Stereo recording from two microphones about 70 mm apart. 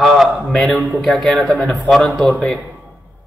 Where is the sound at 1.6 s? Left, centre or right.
Centre.